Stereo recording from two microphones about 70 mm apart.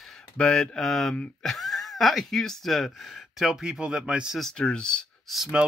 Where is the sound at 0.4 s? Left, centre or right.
Centre.